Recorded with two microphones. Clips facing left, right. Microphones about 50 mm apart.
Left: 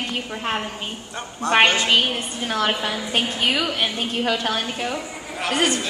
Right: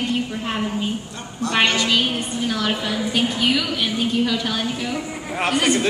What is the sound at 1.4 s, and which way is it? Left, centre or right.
A woman's voice, left.